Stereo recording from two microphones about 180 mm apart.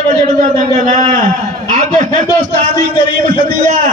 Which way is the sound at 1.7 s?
45° right (ahead or behind).